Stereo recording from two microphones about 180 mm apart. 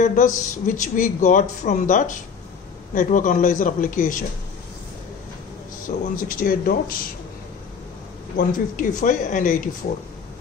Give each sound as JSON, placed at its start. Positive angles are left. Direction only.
{"t": 0.0, "sound": "speech", "side_deg": 45}
{"t": 5.9, "sound": "speech", "side_deg": 50}
{"t": 8.4, "sound": "speech", "side_deg": 50}